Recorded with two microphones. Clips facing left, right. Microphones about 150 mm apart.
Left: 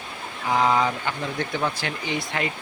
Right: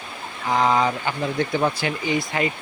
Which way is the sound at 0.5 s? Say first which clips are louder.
Right 1 dB; centre (ahead or behind).